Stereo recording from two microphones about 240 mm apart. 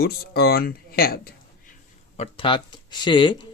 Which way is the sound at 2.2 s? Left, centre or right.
Left.